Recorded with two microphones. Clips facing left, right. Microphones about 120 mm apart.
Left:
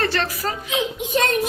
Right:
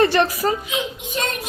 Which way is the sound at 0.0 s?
15° right (ahead or behind).